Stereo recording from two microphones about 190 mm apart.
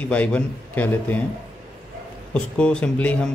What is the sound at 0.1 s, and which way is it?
Speech, 5° left (ahead or behind).